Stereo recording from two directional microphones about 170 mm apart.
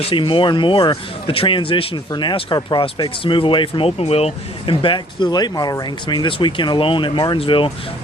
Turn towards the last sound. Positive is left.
turn(degrees=30)  # may be behind; listen again after turning